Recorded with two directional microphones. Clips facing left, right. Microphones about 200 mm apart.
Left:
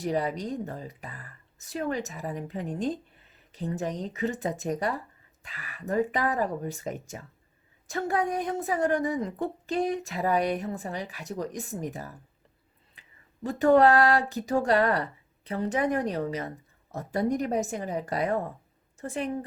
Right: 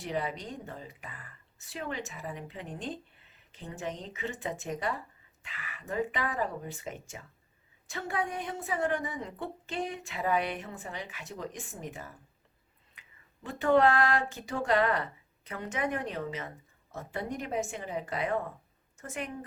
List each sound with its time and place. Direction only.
0.0 s a woman's voice: 40° left (ahead or behind)
13.0 s a sound: 40° left (ahead or behind)
15.4 s a woman's voice: 35° left (ahead or behind)